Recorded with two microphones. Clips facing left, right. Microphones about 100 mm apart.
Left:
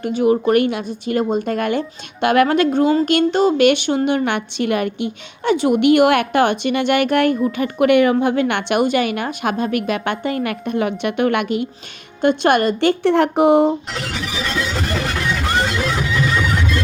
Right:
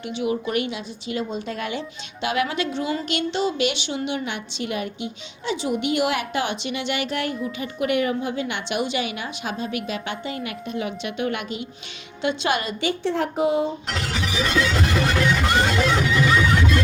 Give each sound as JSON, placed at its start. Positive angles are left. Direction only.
{"t": 0.0, "sound": "a woman's voice", "side_deg": 45}